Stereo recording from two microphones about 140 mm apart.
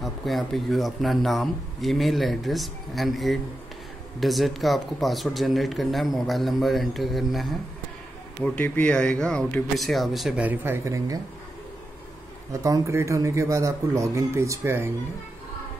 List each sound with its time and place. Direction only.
0.0 s speech: centre (ahead or behind)
8.5 s speech: 10° left (ahead or behind); by 11.1 s 20° right (ahead or behind)
12.6 s speech: 25° right (ahead or behind)